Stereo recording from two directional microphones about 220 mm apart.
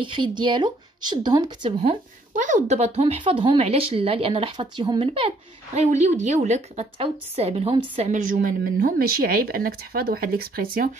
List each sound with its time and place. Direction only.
0.0 s a woman's voice: 20° right (ahead or behind); by 11.0 s 40° right (ahead or behind)